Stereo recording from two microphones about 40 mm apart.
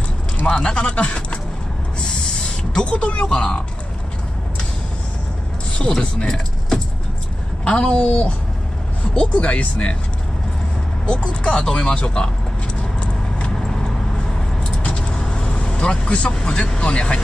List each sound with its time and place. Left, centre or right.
0.7 s speech: left
2.0 s music: centre
5.8 s speech: centre
7.6 s speech: left
11.1 s speech: centre
11.7 s speech: left
13.7 s vehicle: centre
14.8 s vehicle: left
16.3 s speech: left